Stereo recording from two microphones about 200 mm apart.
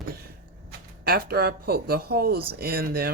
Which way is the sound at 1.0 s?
50° right (ahead or behind).